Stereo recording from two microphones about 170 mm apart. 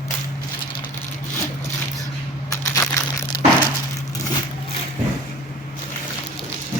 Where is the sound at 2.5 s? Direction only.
20° left (ahead or behind).